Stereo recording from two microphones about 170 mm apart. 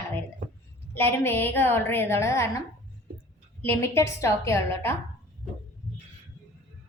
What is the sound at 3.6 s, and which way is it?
A woman's voice, 15° left (ahead or behind).